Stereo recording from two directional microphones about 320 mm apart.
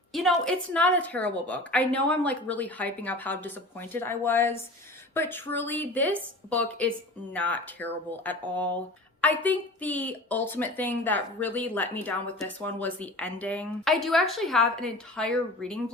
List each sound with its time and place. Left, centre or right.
0.1 s a woman's voice: centre